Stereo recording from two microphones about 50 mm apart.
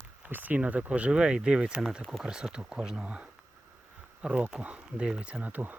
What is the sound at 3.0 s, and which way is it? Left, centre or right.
Speech, right.